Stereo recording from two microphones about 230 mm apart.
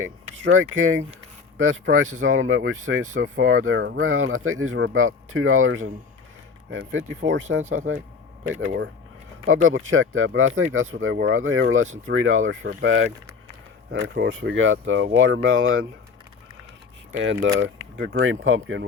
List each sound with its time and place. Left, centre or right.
0.0 s speech: right
8.6 s speech: right
17.2 s speech: right